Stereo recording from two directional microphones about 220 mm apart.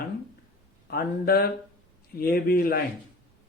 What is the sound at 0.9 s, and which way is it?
A man's voice, 45° left (ahead or behind).